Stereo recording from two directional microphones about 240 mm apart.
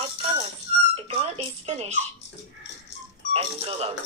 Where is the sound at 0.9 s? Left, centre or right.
Right.